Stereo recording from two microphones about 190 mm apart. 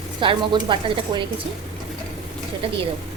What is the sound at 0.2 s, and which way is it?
A woman's voice, 25° right (ahead or behind).